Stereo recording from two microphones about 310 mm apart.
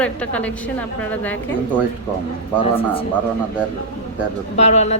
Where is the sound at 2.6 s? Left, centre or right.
Centre.